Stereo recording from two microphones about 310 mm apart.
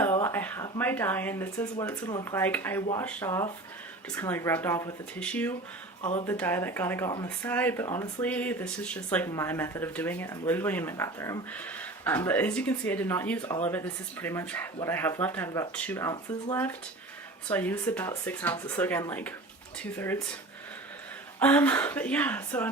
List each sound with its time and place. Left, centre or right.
0.0 s speech: centre
6.0 s speech: left
6.2 s speech: centre
21.3 s speech: centre